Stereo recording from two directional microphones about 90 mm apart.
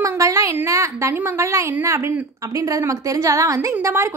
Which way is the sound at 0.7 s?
35° right (ahead or behind).